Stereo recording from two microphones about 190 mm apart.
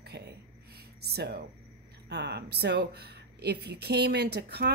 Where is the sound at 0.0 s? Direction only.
60° right (ahead or behind).